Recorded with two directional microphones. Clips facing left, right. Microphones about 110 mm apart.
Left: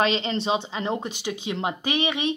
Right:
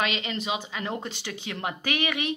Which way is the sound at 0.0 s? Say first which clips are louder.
Left 6 dB; 30° left (ahead or behind).